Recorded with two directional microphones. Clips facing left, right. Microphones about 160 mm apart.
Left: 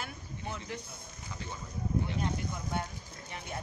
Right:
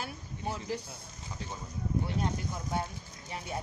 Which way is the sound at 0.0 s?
35° right (ahead or behind).